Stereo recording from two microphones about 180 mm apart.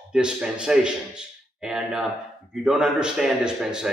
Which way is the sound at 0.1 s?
5° right (ahead or behind).